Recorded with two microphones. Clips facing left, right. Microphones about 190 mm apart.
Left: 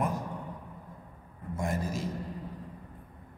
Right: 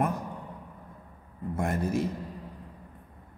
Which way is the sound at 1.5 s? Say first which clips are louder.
Right 4 dB; 60° right (ahead or behind).